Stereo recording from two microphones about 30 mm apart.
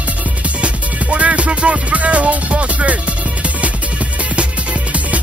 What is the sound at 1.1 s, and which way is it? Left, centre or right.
Music, right.